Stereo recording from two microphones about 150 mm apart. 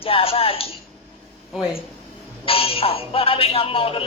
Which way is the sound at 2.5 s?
40° left (ahead or behind).